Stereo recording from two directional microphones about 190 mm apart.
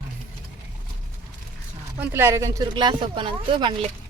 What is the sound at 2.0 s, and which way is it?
Speech, 10° right (ahead or behind).